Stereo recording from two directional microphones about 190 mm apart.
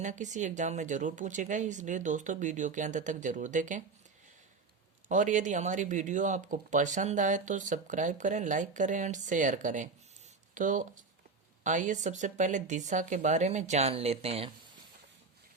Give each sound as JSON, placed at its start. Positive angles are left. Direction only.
{"t": 0.0, "sound": "speech", "side_deg": -40}
{"t": 5.0, "sound": "speech", "side_deg": -40}